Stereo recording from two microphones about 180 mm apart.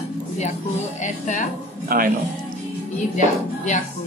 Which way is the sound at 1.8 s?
55° right (ahead or behind).